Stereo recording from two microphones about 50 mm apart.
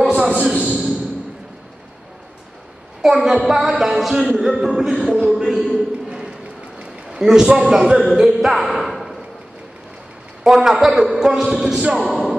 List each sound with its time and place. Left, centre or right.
0.0 s a sound: right
3.0 s a man's voice: centre
6.0 s music: centre
6.8 s a man's voice: centre
10.4 s speech: centre
11.8 s speech: right
12.1 s music: centre